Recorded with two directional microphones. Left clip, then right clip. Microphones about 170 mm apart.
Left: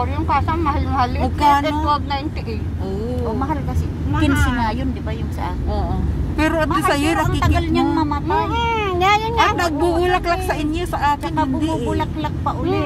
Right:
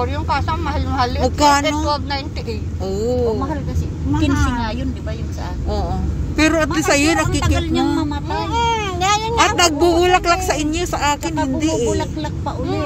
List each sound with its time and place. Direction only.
0.0 s speech: 5° right (ahead or behind)
4.2 s speech: 20° left (ahead or behind)
6.3 s speech: 10° right (ahead or behind)
9.6 s speech: 15° right (ahead or behind)